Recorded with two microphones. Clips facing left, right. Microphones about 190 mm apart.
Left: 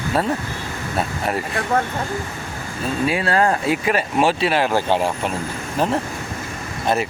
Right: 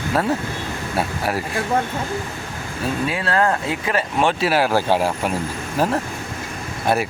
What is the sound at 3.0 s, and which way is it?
Speech, 10° left (ahead or behind).